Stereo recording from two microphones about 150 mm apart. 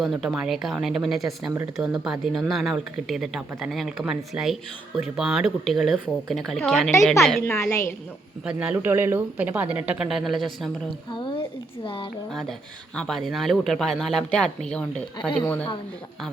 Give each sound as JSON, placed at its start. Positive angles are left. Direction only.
{"t": 0.0, "sound": "speech", "side_deg": 0}
{"t": 7.4, "sound": "a woman's voice", "side_deg": 15}
{"t": 8.4, "sound": "speech", "side_deg": -10}
{"t": 10.8, "sound": "a sound", "side_deg": 35}
{"t": 12.3, "sound": "a woman's voice", "side_deg": 0}